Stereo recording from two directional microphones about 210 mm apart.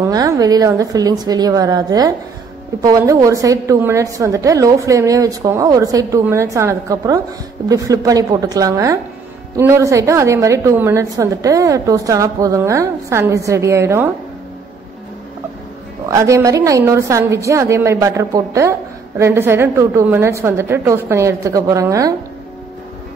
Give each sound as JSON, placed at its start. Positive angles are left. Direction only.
{"t": 0.0, "sound": "a woman's voice", "side_deg": -15}
{"t": 16.1, "sound": "a woman's voice", "side_deg": -15}